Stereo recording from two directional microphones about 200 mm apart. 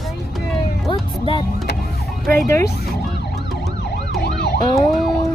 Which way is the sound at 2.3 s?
10° left (ahead or behind).